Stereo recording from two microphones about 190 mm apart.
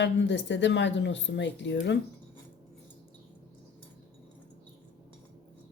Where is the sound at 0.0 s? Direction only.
70° left (ahead or behind).